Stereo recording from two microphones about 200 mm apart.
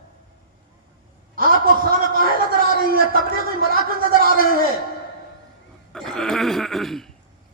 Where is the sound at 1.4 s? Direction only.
45° right (ahead or behind).